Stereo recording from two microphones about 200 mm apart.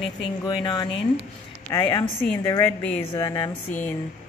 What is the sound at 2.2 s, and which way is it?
Speech, 15° left (ahead or behind).